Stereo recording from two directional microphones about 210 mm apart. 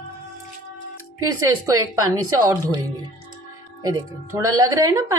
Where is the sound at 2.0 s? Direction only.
20° right (ahead or behind).